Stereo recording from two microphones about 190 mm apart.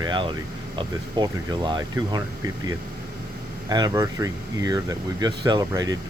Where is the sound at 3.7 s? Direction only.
20° right (ahead or behind).